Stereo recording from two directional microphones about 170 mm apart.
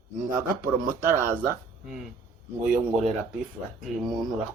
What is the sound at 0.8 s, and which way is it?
Speech, 55° right (ahead or behind).